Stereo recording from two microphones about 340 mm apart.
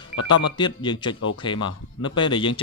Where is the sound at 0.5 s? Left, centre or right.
Centre.